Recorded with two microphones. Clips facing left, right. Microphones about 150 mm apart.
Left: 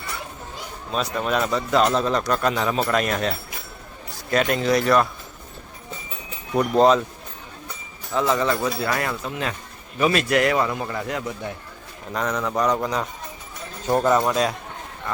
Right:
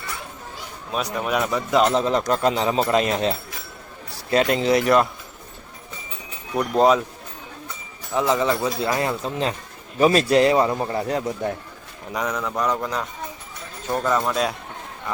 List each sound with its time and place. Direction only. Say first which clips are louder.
0.9 s speech: left 1 dB; 10° right (ahead or behind)
6.6 s speech: left 1 dB; 5° right (ahead or behind)
8.1 s speech: right 1 dB; 15° right (ahead or behind); by 11.5 s 35° right (ahead or behind)
12.1 s speech: left 1 dB; 5° right (ahead or behind)
13.8 s speech: left 3 dB; 20° left (ahead or behind)